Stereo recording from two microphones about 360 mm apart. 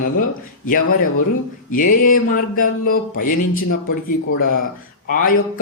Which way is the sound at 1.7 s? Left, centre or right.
Left.